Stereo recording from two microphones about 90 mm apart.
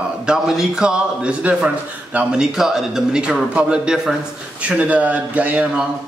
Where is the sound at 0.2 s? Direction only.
5° right (ahead or behind).